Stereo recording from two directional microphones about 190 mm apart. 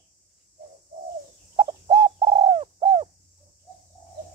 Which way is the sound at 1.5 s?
25° right (ahead or behind).